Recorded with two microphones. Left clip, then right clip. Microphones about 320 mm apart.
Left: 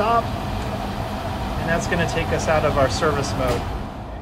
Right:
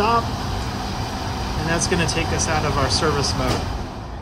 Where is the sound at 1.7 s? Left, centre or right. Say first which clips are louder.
Even; centre.